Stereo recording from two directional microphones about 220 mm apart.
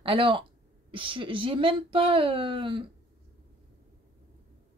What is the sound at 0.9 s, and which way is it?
A woman's voice, 25° right (ahead or behind).